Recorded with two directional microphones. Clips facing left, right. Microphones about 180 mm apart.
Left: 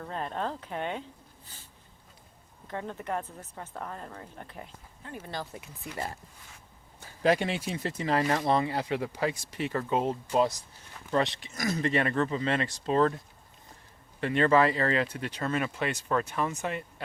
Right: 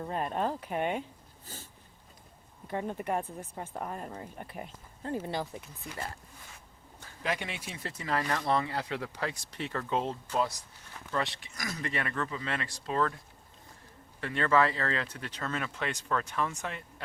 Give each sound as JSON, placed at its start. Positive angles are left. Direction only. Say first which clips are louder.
{"t": 0.0, "sound": "speech", "louder": "right 2 dB", "side_deg": -15}
{"t": 2.6, "sound": "speech", "louder": "right 2 dB", "side_deg": -15}
{"t": 5.0, "sound": "speech", "louder": "right 5 dB", "side_deg": -25}
{"t": 7.2, "sound": "speech", "louder": "left 9 dB", "side_deg": 35}
{"t": 7.8, "sound": "speech", "louder": "left 4 dB", "side_deg": 20}
{"t": 11.1, "sound": "speech", "louder": "left 6 dB", "side_deg": 20}
{"t": 14.2, "sound": "speech", "louder": "left 4 dB", "side_deg": 20}